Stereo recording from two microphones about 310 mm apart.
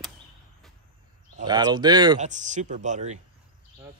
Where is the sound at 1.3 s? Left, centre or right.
Centre.